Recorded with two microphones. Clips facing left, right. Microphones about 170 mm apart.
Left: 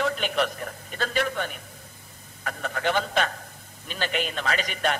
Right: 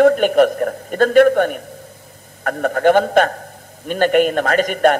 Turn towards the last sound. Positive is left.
turn(degrees=-50)  # may be behind; listen again after turning